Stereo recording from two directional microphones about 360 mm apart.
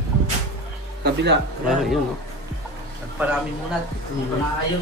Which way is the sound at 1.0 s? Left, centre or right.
Right.